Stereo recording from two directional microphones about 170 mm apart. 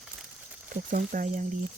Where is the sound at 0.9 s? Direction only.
50° right (ahead or behind).